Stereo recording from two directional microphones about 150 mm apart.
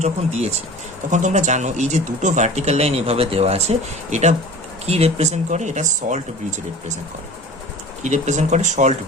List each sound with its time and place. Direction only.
0.0 s speech: 45° right (ahead or behind)
8.0 s speech: 50° right (ahead or behind)